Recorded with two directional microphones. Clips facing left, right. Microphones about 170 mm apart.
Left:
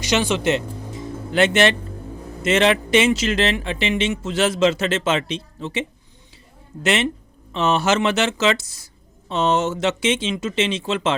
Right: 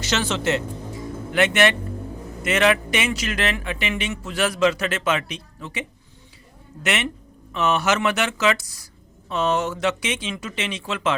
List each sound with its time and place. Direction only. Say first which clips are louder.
0.0 s speech: left 4 dB; 15° left (ahead or behind)
1.3 s speech: left 2 dB; 30° left (ahead or behind)
6.8 s speech: left 5 dB; 30° left (ahead or behind)